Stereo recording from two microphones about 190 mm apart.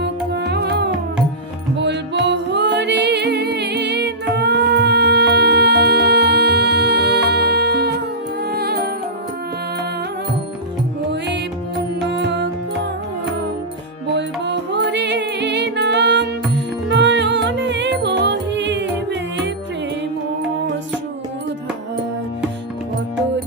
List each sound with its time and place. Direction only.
0.0 s music: 60° right (ahead or behind)
11.9 s music: 70° right (ahead or behind)
14.1 s music: 65° right (ahead or behind)